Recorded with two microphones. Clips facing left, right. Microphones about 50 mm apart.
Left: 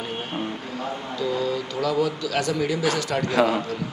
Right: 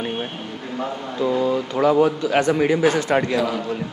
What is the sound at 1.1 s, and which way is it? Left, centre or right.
Speech, right.